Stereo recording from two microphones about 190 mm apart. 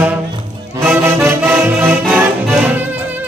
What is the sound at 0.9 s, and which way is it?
Music, 10° right (ahead or behind).